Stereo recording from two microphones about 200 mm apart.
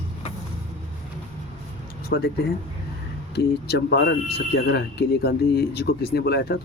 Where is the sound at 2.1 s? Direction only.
55° left (ahead or behind).